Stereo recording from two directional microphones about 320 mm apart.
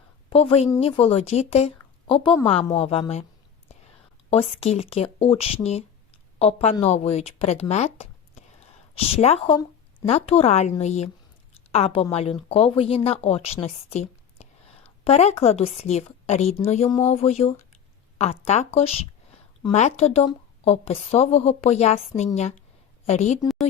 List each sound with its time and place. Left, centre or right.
0.3 s speech: centre
4.3 s a woman's voice: centre